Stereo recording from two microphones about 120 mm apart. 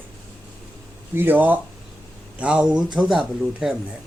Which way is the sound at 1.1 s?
15° right (ahead or behind).